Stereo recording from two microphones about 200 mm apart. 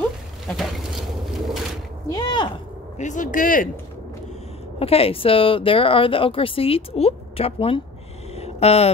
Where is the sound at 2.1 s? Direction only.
20° left (ahead or behind).